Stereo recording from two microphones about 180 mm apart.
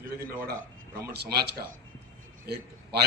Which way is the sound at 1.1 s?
65° right (ahead or behind).